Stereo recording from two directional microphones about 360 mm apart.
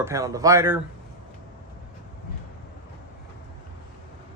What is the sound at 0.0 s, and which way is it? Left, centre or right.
Speech, centre.